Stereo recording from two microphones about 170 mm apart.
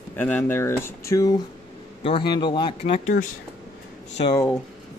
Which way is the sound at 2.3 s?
30° left (ahead or behind).